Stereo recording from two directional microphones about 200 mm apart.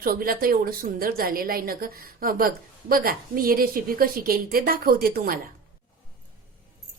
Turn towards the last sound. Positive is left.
turn(degrees=-45)  # may be behind; listen again after turning